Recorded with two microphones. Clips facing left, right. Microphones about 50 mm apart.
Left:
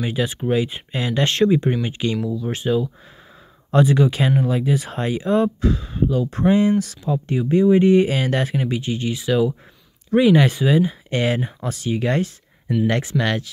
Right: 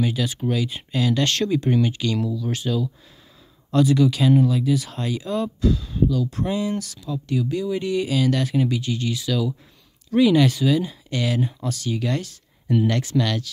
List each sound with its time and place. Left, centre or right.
0.0 s speech: left